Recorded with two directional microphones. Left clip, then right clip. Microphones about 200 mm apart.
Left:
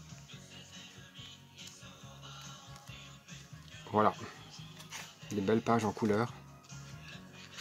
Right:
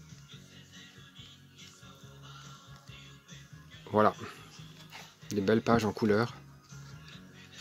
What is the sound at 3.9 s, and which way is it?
Music, 25° right (ahead or behind).